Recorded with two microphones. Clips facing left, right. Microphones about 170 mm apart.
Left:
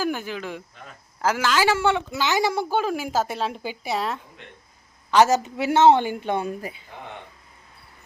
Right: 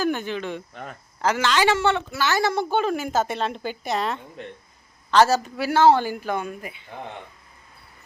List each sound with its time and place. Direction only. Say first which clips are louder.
0.0 s a woman's voice: right 2 dB; 5° left (ahead or behind)
4.4 s speech: right 9 dB; 40° right (ahead or behind)
5.1 s speech: even; 15° left (ahead or behind); by 6.7 s 35° left (ahead or behind)